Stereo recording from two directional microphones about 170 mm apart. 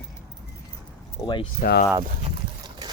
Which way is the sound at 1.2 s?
25° left (ahead or behind).